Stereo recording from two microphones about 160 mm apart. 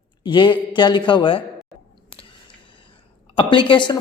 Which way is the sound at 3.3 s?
30° left (ahead or behind).